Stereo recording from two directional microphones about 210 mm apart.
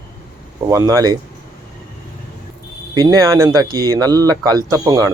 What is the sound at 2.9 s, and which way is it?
A man's voice, 20° right (ahead or behind).